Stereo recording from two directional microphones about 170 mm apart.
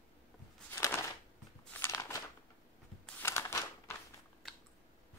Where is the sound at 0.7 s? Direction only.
15° left (ahead or behind).